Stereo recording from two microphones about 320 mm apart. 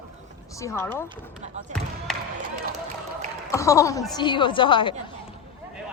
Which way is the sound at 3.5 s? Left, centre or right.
Centre.